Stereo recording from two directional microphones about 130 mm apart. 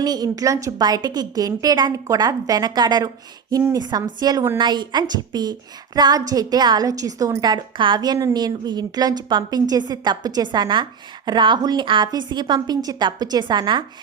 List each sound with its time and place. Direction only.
0.0 s a woman's voice: 30° right (ahead or behind)